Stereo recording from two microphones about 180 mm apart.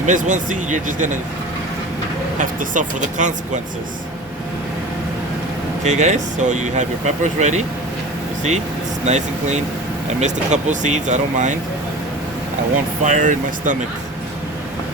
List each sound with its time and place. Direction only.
0.0 s speech: 45° right (ahead or behind)
2.4 s speech: 45° right (ahead or behind)
5.8 s speech: 40° right (ahead or behind)
9.0 s speech: 40° right (ahead or behind)
13.0 s speech: 45° right (ahead or behind)